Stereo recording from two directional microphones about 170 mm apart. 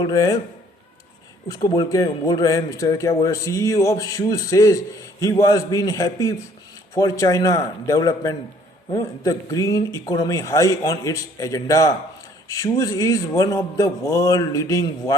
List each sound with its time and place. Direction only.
0.0 s speech: 20° left (ahead or behind)
1.5 s speech: 20° left (ahead or behind)